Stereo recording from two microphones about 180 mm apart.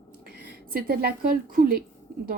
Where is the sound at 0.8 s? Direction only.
55° right (ahead or behind).